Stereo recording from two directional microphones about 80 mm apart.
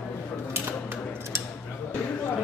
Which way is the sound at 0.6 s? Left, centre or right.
Right.